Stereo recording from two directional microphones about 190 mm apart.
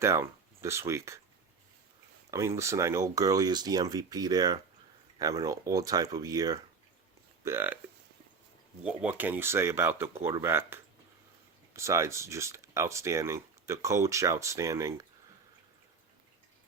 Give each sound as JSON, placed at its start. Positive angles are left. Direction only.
{"t": 0.0, "sound": "speech", "side_deg": -15}
{"t": 2.6, "sound": "speech", "side_deg": -15}
{"t": 8.8, "sound": "speech", "side_deg": -5}